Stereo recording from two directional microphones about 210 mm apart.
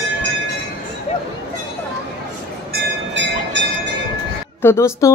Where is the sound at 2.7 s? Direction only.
55° right (ahead or behind).